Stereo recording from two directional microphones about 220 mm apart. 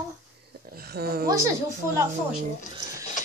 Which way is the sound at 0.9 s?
45° right (ahead or behind).